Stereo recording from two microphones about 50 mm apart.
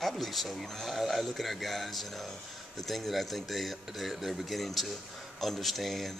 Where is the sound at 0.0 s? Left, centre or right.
Centre.